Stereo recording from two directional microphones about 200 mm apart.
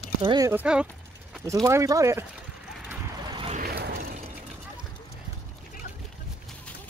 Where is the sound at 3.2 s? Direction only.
25° right (ahead or behind).